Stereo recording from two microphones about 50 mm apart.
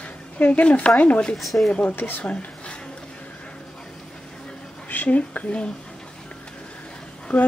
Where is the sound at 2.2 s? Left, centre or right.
Left.